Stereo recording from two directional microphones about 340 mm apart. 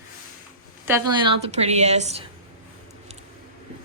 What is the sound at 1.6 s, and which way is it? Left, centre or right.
Speech, centre.